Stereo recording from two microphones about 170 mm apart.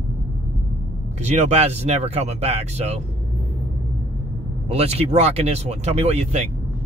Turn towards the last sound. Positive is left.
turn(degrees=-40)  # may be behind; listen again after turning